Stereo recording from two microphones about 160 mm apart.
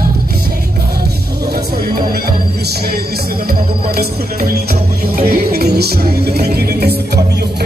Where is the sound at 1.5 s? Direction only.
70° right (ahead or behind).